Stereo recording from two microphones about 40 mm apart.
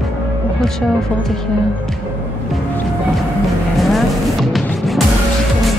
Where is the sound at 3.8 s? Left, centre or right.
Centre.